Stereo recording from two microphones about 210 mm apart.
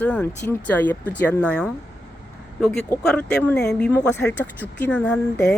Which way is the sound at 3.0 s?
5° left (ahead or behind).